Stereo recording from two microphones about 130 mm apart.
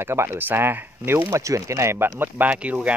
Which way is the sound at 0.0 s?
20° right (ahead or behind).